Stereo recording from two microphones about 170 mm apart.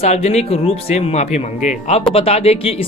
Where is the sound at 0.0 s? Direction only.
40° left (ahead or behind).